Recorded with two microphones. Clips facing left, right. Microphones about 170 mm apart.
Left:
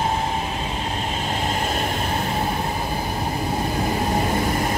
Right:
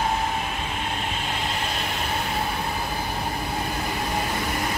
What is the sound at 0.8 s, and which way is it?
Vehicle, 35° left (ahead or behind).